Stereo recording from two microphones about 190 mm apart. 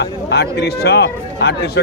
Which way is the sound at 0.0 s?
60° left (ahead or behind).